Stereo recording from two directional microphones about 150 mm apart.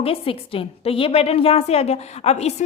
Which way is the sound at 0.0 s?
40° left (ahead or behind).